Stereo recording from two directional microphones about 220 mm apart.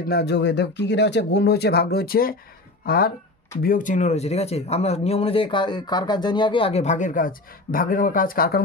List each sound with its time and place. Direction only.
0.0 s speech: 45° left (ahead or behind)